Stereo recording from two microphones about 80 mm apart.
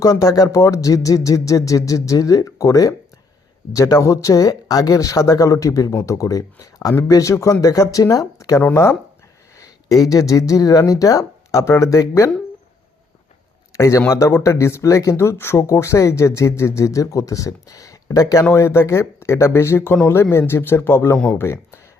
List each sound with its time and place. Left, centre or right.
0.0 s speech: left
8.7 s speech: left
9.6 s speech: left
13.7 s a man's voice: left